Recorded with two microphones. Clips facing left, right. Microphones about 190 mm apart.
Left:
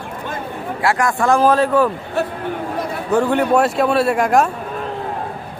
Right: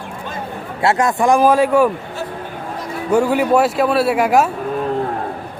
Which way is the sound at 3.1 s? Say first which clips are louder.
Right 2 dB; 10° right (ahead or behind).